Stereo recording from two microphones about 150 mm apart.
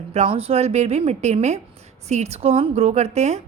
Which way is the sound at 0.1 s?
40° right (ahead or behind).